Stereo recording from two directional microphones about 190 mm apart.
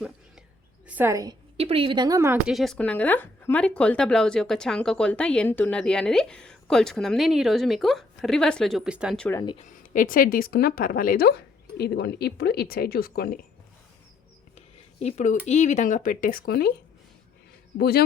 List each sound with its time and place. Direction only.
0.9 s a woman's voice: 10° right (ahead or behind)
1.5 s a woman's voice: 30° right (ahead or behind); by 2.4 s 15° right (ahead or behind)
2.5 s a woman's voice: centre (ahead or behind)
9.2 s speech: 15° left (ahead or behind)
9.6 s speech: 45° left (ahead or behind)
15.0 s speech: 40° left (ahead or behind); by 16.7 s 55° left (ahead or behind)
17.7 s a man's voice: 55° left (ahead or behind)